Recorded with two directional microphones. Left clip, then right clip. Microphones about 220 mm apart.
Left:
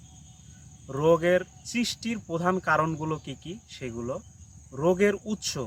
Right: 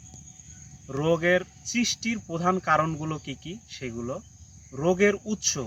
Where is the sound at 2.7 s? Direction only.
15° left (ahead or behind).